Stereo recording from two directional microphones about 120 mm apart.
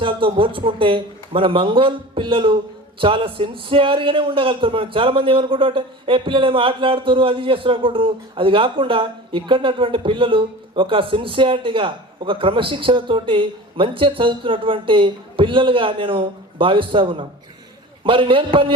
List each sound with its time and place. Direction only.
0.0 s a man's voice: 45° right (ahead or behind)